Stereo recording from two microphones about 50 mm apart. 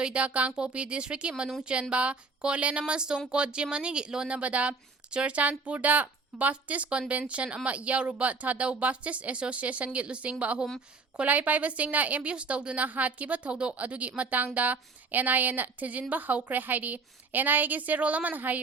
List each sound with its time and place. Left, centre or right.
0.0 s a woman's voice: right